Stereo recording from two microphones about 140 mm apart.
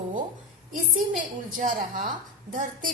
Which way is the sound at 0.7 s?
70° right (ahead or behind).